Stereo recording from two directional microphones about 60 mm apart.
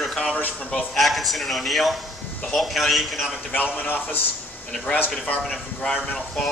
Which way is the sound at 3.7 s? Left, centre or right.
Left.